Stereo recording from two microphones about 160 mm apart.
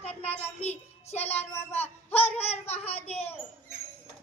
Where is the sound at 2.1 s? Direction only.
40° left (ahead or behind).